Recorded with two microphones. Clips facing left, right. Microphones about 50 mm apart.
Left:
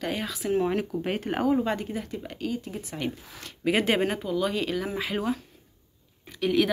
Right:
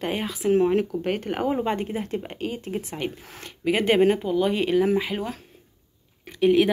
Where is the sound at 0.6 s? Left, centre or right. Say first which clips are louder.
Right 5 dB; centre.